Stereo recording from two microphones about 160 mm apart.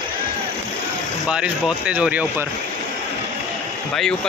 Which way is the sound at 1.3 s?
5° right (ahead or behind).